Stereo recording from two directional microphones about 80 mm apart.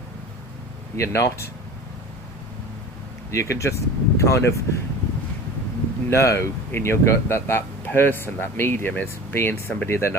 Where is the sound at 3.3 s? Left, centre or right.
Left.